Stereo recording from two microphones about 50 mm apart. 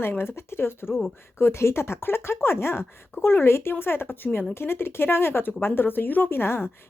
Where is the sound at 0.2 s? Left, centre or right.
Left.